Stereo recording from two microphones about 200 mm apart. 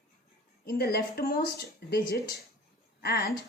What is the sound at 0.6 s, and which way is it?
Speech, 50° left (ahead or behind).